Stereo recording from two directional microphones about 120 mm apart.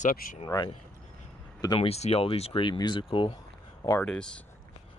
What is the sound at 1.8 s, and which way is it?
Speech, 60° left (ahead or behind).